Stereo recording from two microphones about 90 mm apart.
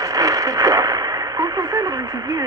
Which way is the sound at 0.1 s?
45° right (ahead or behind).